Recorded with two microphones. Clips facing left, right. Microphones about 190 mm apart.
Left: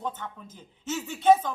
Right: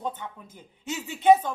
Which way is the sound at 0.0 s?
15° right (ahead or behind).